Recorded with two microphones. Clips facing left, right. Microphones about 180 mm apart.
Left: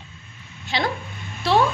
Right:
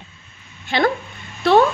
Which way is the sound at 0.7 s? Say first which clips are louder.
Right 6 dB; 55° right (ahead or behind).